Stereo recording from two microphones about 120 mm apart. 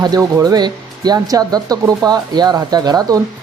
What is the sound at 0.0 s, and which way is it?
Speech, 30° right (ahead or behind).